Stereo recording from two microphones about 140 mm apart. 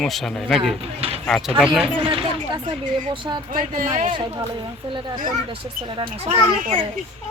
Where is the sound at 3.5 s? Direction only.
70° right (ahead or behind).